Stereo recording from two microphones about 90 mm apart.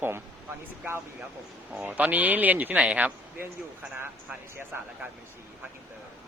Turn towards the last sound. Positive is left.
turn(degrees=-25)  # may be behind; listen again after turning